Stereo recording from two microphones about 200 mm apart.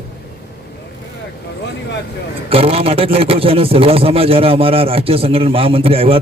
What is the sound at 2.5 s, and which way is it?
Speech, 30° right (ahead or behind).